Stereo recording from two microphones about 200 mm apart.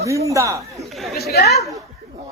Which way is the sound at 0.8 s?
Centre (ahead or behind).